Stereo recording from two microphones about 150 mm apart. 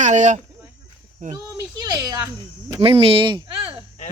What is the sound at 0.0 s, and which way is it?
Speech, 55° right (ahead or behind).